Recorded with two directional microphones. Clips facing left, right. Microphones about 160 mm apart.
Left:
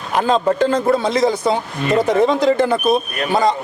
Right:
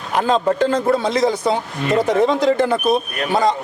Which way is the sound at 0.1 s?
10° left (ahead or behind).